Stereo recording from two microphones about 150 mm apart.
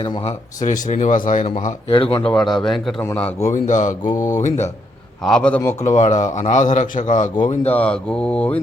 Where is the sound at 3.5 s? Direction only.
55° left (ahead or behind).